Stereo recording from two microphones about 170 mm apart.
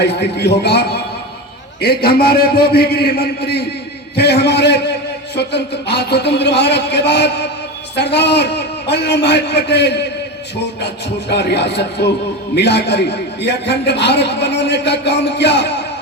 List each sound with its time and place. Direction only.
0.0 s a man's voice: 85° left